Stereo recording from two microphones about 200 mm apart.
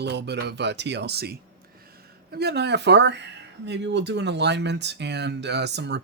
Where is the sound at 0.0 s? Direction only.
60° right (ahead or behind).